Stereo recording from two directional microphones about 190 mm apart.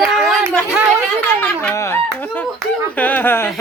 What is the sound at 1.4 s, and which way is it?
A woman's voice, 10° left (ahead or behind).